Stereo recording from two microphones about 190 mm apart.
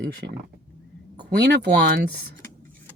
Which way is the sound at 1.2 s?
60° right (ahead or behind).